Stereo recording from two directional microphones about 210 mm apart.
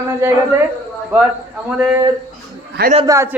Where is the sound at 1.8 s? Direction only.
5° right (ahead or behind).